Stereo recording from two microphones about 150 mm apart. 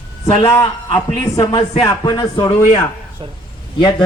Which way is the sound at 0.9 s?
25° left (ahead or behind).